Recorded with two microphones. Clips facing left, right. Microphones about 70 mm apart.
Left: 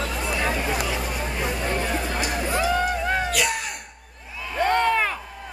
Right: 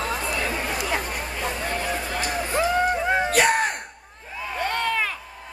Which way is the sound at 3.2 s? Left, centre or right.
Right.